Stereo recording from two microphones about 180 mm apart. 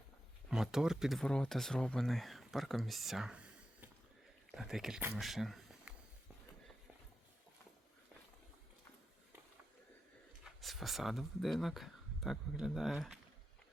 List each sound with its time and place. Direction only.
0.4 s speech: 5° right (ahead or behind)
10.4 s speech: centre (ahead or behind)